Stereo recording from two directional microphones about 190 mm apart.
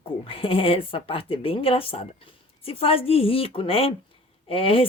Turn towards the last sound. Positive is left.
turn(degrees=30)  # may be behind; listen again after turning